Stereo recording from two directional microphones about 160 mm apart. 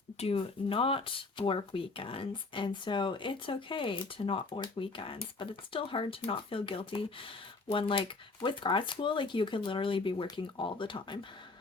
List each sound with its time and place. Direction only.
0.2 s speech: 35° left (ahead or behind)